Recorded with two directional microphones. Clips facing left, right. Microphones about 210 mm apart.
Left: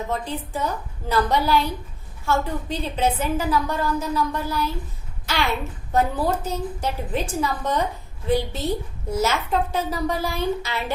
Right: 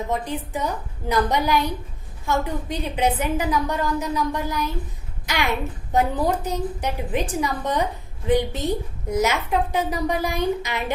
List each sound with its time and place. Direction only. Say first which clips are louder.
0.1 s a woman's voice: right 1 dB; 15° right (ahead or behind)